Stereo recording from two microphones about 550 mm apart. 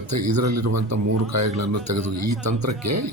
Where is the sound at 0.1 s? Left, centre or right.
Right.